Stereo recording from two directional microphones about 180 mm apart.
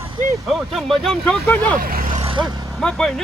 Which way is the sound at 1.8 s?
50° right (ahead or behind).